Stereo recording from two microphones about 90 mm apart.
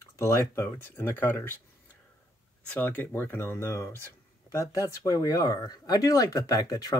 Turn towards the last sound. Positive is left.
turn(degrees=45)  # may be behind; listen again after turning